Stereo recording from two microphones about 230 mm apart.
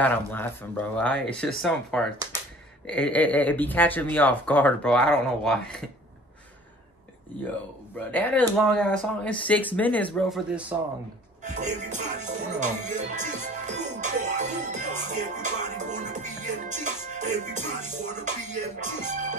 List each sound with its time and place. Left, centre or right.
0.0 s speech: centre
8.1 s speech: centre
11.4 s music: right